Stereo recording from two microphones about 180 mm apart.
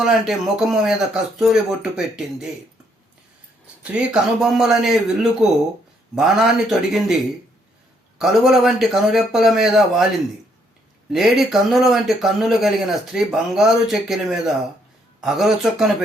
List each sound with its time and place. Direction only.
0.0 s speech: centre (ahead or behind)
3.9 s speech: 5° right (ahead or behind)
8.2 s speech: centre (ahead or behind)
11.1 s speech: centre (ahead or behind)